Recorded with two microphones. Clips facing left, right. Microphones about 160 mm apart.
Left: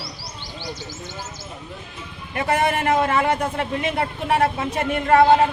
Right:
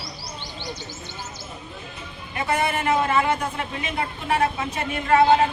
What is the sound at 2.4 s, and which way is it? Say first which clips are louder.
A man's voice: left 3 dB; 60° left (ahead or behind).